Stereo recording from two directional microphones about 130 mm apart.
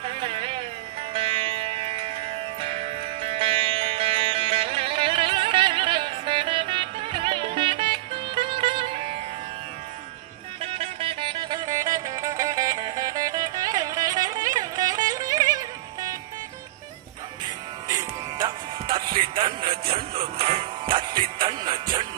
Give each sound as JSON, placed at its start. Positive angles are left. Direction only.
{"t": 0.0, "sound": "a sound", "side_deg": -45}
{"t": 1.1, "sound": "music", "side_deg": -45}
{"t": 10.6, "sound": "music", "side_deg": -50}
{"t": 17.8, "sound": "music", "side_deg": -30}